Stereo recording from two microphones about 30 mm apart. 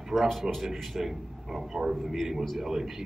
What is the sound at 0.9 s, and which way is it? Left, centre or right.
A man's voice, centre.